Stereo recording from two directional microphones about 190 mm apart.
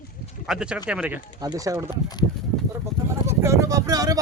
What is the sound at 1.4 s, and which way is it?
Speech, 20° right (ahead or behind).